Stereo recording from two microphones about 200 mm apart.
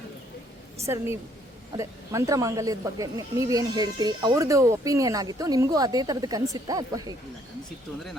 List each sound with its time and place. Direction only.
1.7 s speech: 15° right (ahead or behind)